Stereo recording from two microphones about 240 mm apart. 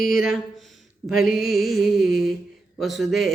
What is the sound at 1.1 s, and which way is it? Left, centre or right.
A man's voice, centre.